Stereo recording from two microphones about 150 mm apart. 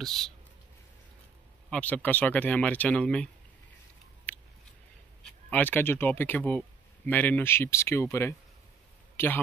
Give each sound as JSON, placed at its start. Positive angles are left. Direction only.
{"t": 0.0, "sound": "speech", "side_deg": 5}
{"t": 1.7, "sound": "speech", "side_deg": 10}
{"t": 4.3, "sound": "a sound", "side_deg": 10}
{"t": 5.2, "sound": "a man's voice", "side_deg": 10}